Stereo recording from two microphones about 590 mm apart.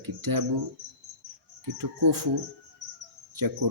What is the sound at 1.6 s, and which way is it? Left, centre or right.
Speech, right.